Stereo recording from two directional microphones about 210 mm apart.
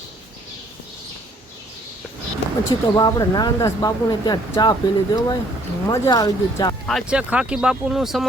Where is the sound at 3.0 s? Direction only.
20° left (ahead or behind).